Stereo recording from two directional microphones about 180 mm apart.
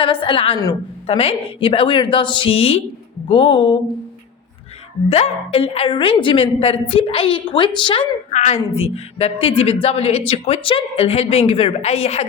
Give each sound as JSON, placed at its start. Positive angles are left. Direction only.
{"t": 0.0, "sound": "a woman's voice", "side_deg": 30}
{"t": 5.0, "sound": "speech", "side_deg": 35}
{"t": 8.3, "sound": "a sound", "side_deg": 40}
{"t": 8.7, "sound": "speech", "side_deg": 35}